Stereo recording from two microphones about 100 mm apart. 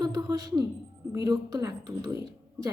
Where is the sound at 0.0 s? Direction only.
40° right (ahead or behind).